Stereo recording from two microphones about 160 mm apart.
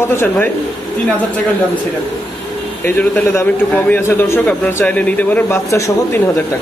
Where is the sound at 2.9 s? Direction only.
10° left (ahead or behind).